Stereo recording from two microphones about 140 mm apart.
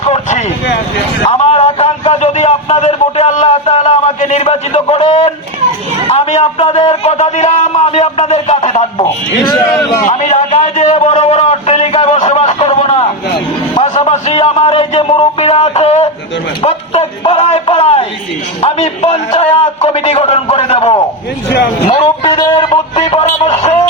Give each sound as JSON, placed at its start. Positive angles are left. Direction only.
{"t": 0.0, "sound": "a sound", "side_deg": 55}
{"t": 6.1, "sound": "a man's voice", "side_deg": 45}
{"t": 9.4, "sound": "a man's voice", "side_deg": 25}
{"t": 10.1, "sound": "a man's voice", "side_deg": 55}
{"t": 23.0, "sound": "a man's voice", "side_deg": 45}